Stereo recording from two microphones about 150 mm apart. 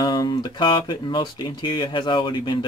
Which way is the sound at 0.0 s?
25° left (ahead or behind).